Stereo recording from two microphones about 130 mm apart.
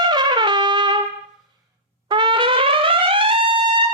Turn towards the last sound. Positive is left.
turn(degrees=-40)  # may be behind; listen again after turning